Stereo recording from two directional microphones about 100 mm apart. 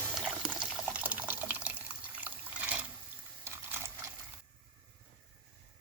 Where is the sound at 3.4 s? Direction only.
25° right (ahead or behind).